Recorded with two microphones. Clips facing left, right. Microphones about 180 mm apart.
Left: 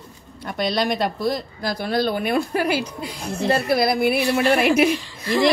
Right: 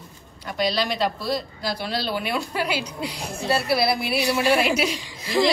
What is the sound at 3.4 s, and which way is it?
A woman's voice, 50° left (ahead or behind).